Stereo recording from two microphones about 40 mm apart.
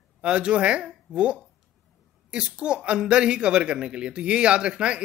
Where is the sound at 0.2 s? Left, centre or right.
Right.